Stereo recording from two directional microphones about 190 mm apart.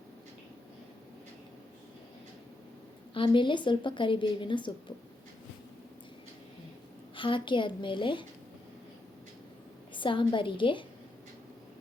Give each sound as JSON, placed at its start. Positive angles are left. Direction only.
{"t": 3.2, "sound": "a woman's voice", "side_deg": 25}
{"t": 7.2, "sound": "a woman's voice", "side_deg": 25}
{"t": 9.9, "sound": "a woman's voice", "side_deg": 25}